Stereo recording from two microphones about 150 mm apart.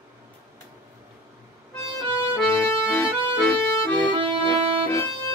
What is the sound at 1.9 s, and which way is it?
Accordion, 15° left (ahead or behind).